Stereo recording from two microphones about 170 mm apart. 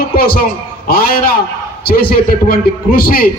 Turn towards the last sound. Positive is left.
turn(degrees=60)  # may be behind; listen again after turning